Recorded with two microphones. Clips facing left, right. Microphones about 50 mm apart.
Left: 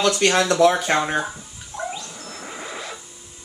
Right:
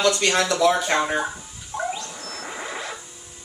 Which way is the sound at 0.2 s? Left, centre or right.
Left.